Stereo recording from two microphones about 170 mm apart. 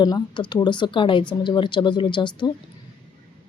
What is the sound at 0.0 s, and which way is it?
Speech, 25° left (ahead or behind).